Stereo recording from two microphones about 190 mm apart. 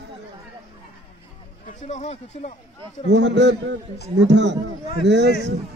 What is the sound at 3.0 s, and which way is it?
A man's voice, 65° right (ahead or behind).